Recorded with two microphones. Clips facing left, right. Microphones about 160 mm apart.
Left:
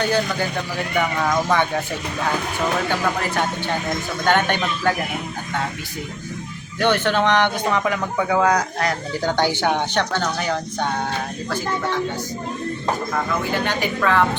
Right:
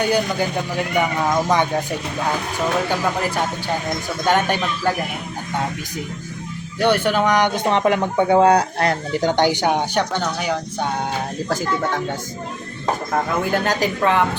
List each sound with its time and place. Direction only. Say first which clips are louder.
0.0 s speech: right 2 dB; 15° right (ahead or behind)
4.3 s speech: right 1 dB; 5° right (ahead or behind)
6.7 s speech: right 1 dB; 10° right (ahead or behind); by 9.0 s 30° right (ahead or behind)
9.1 s speech: right 3 dB; 20° right (ahead or behind)
11.4 s speech: right 2 dB; 45° right (ahead or behind)
13.5 s a woman's voice: right 3 dB; 40° right (ahead or behind)